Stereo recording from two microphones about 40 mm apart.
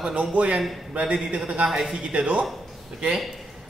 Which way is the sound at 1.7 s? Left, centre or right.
Centre.